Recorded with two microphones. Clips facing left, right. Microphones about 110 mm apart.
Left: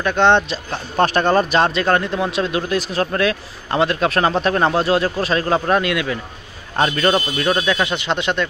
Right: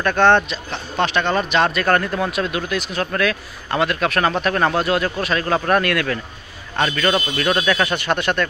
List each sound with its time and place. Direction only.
0.0 s speech: 20° left (ahead or behind)
0.5 s speech: 45° left (ahead or behind); by 2.3 s 20° left (ahead or behind)
2.3 s speech: 30° left (ahead or behind)
6.8 s speech: 25° left (ahead or behind)